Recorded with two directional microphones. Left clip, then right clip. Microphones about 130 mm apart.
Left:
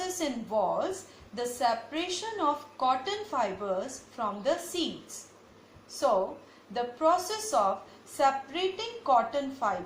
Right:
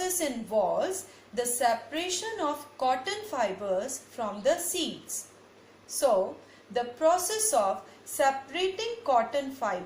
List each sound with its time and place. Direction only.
0.0 s a woman's voice: 45° right (ahead or behind)
6.7 s a woman's voice: 45° right (ahead or behind)